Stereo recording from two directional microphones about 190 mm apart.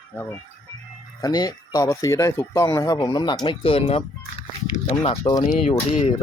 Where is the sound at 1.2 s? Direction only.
20° left (ahead or behind).